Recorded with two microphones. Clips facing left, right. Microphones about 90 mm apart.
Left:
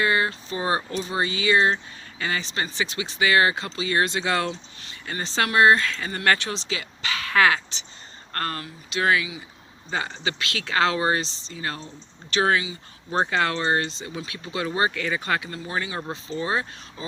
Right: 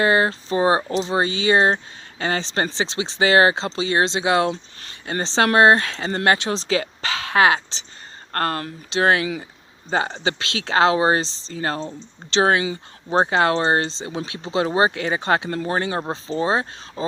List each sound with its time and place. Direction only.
0.0 s speech: 30° right (ahead or behind)
6.2 s speech: 20° right (ahead or behind)
6.5 s speech: 35° right (ahead or behind)
8.3 s speech: 45° right (ahead or behind)
8.9 s speech: 35° right (ahead or behind)
13.1 s speech: 25° right (ahead or behind)
15.4 s speech: 45° right (ahead or behind)